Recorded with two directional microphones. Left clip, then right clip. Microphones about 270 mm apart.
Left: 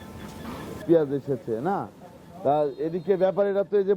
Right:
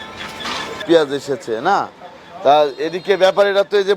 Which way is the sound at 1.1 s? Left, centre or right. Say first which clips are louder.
Right 7 dB; centre.